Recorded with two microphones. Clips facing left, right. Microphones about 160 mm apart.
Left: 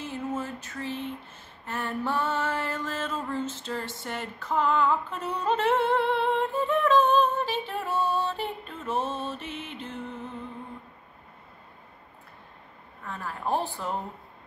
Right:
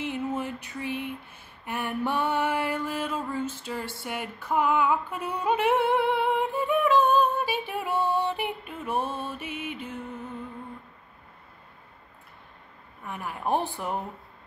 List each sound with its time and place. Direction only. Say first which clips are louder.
0.0 s a sound: right 2 dB; 20° right (ahead or behind)
1.7 s mantra: right 1 dB; 15° right (ahead or behind)
13.0 s speech: right 1 dB; 15° right (ahead or behind)